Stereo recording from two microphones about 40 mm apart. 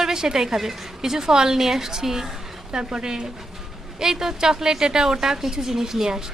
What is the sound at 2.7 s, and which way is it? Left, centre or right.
A woman's voice, right.